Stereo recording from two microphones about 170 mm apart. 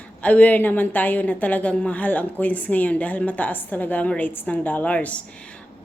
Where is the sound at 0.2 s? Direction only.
10° left (ahead or behind).